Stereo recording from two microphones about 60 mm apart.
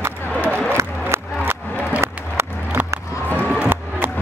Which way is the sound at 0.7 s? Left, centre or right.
Right.